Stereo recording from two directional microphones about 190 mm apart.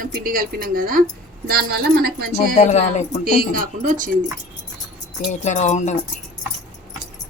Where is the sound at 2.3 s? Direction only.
40° left (ahead or behind).